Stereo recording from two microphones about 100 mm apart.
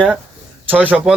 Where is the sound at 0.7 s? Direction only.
15° right (ahead or behind).